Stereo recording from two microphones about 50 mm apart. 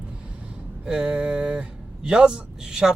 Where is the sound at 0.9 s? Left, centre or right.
Centre.